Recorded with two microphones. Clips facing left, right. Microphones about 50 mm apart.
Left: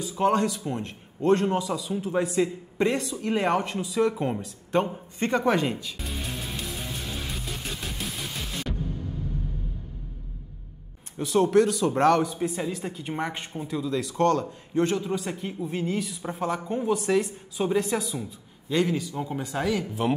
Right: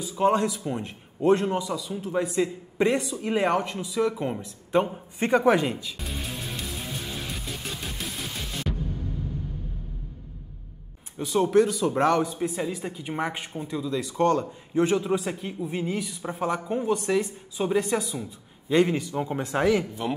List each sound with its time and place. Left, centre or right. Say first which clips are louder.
0.0 s a man's voice: right 1 dB; centre
1.5 s a man's voice: left 1 dB; centre
5.7 s music: even; centre
11.1 s speech: even; centre
18.7 s speech: right 3 dB; right
19.9 s speech: left 4 dB; centre